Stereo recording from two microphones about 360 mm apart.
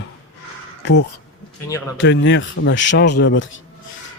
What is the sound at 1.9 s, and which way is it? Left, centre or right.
A man's voice, left.